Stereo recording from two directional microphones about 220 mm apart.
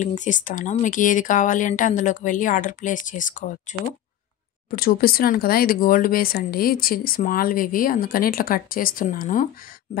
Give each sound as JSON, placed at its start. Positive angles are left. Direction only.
{"t": 0.0, "sound": "speech", "side_deg": 35}
{"t": 4.6, "sound": "speech", "side_deg": 40}